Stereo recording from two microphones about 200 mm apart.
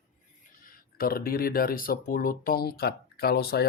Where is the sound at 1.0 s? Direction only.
50° left (ahead or behind).